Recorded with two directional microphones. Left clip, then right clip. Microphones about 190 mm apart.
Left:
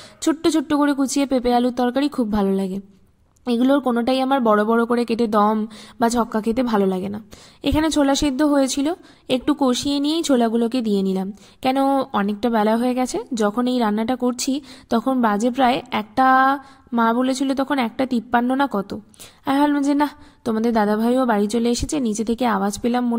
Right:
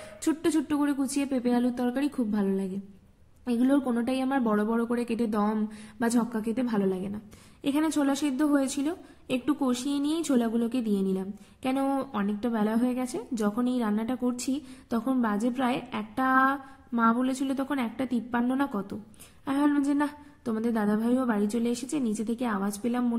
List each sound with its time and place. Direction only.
0.2 s a woman's voice: 40° left (ahead or behind)